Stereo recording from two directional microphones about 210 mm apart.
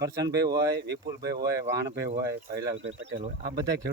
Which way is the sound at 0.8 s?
55° right (ahead or behind).